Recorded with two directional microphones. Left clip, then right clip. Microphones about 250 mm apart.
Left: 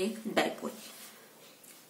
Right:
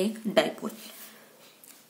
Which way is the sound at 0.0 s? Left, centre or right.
Right.